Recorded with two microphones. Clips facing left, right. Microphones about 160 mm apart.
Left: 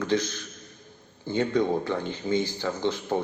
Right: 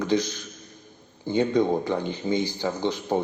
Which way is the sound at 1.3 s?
15° right (ahead or behind).